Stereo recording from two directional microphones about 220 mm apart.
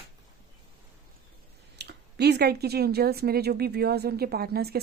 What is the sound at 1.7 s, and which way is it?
Speech, 50° right (ahead or behind).